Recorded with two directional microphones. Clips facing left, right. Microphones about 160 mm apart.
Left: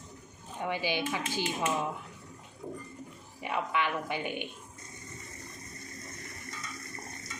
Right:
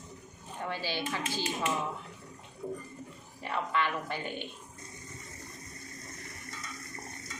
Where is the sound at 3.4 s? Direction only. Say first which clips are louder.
Even; 15° left (ahead or behind).